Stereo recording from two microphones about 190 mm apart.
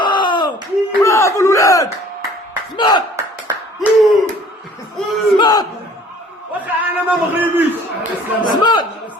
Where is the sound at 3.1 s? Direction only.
10° right (ahead or behind).